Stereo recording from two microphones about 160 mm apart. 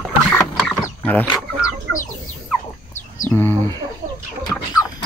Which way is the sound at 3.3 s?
15° left (ahead or behind).